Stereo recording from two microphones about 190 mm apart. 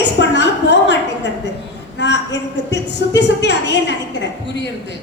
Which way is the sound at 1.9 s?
65° left (ahead or behind).